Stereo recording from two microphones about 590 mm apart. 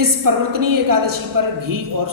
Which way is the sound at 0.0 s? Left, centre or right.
Right.